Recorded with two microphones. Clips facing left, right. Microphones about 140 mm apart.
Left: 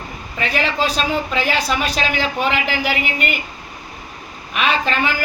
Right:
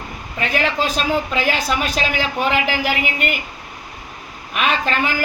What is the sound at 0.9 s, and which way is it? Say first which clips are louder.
Speech: even; 10° right (ahead or behind).